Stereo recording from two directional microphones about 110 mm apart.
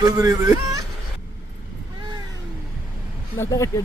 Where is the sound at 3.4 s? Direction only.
30° left (ahead or behind).